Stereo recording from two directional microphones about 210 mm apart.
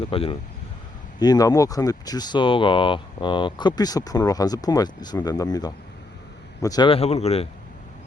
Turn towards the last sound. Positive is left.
turn(degrees=30)  # may be behind; listen again after turning